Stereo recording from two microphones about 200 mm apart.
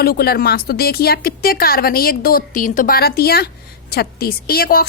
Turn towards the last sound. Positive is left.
turn(degrees=50)  # may be behind; listen again after turning